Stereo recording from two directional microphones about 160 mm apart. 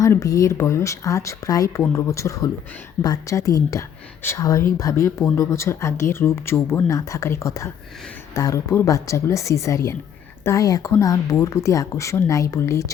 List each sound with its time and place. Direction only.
0.0 s speech: 20° left (ahead or behind)